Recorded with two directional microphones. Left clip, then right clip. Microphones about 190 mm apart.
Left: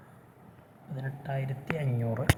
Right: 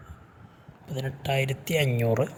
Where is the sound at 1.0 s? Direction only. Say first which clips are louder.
Right 10 dB; 65° right (ahead or behind).